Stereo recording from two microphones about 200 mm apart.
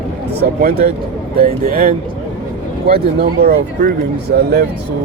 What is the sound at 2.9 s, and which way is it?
Speech, 50° right (ahead or behind).